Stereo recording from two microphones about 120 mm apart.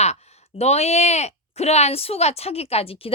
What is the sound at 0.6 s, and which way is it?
Speech, 65° left (ahead or behind).